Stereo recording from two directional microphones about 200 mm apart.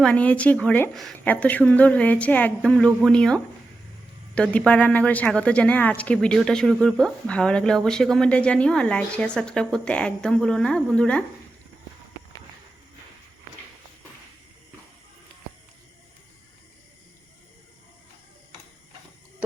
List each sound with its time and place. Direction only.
0.0 s a woman's voice: 5° left (ahead or behind)